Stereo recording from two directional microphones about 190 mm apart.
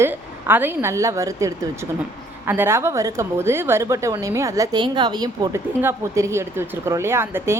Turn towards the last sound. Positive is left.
turn(degrees=-10)  # may be behind; listen again after turning